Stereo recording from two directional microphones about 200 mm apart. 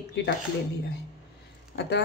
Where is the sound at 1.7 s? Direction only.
55° left (ahead or behind).